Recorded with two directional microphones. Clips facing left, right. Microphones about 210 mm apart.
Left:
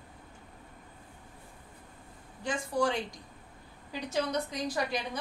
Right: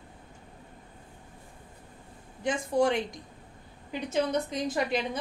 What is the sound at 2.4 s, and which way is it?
A woman's voice, 20° right (ahead or behind).